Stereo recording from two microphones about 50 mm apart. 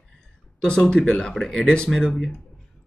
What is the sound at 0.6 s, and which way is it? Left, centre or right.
Speech, centre.